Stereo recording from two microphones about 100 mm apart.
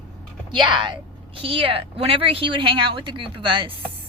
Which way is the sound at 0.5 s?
50° right (ahead or behind).